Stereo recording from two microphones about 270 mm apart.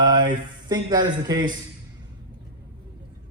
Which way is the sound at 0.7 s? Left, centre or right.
Centre.